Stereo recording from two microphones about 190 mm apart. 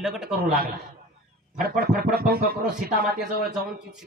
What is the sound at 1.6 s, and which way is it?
Speech, 55° right (ahead or behind).